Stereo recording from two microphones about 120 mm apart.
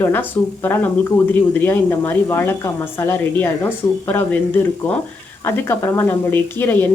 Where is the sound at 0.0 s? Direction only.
15° left (ahead or behind).